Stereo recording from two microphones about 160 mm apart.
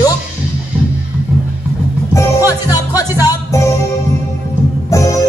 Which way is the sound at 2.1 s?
20° left (ahead or behind).